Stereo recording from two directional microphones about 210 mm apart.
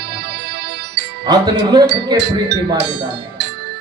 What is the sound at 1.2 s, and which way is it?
Speech, 20° right (ahead or behind).